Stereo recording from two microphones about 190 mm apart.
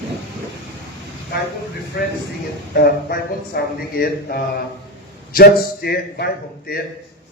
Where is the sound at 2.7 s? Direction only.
55° left (ahead or behind).